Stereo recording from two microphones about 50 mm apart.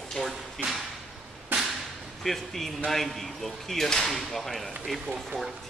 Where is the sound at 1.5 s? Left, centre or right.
Right.